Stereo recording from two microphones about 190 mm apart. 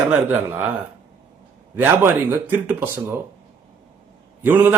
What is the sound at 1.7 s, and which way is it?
Speech, 10° right (ahead or behind).